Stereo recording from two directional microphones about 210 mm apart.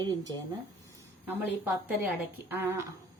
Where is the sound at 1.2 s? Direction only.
10° right (ahead or behind).